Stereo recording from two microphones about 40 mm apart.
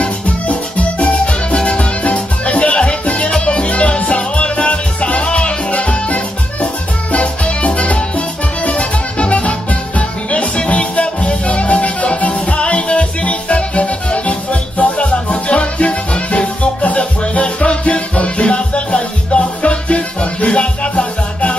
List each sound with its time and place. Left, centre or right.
0.5 s music: left